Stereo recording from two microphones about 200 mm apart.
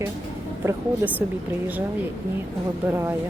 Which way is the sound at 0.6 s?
10° right (ahead or behind).